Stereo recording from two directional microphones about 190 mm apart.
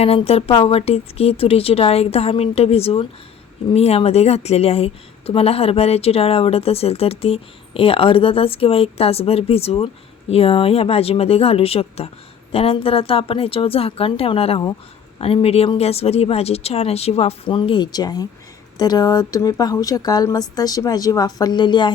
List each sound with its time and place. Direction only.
0.0 s speech: 30° left (ahead or behind)